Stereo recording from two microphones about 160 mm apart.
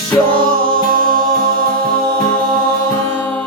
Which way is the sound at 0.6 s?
65° right (ahead or behind).